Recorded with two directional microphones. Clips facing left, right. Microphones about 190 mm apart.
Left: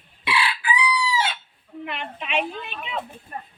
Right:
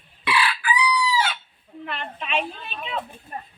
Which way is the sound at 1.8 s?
15° left (ahead or behind).